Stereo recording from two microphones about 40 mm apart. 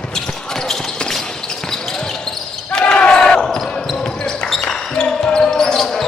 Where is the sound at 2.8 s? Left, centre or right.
Left; by 3.9 s centre.